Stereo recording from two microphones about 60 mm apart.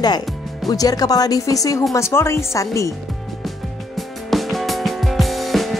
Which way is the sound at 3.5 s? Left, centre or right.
Centre.